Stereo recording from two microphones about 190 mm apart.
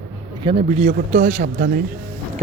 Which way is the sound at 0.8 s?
40° right (ahead or behind).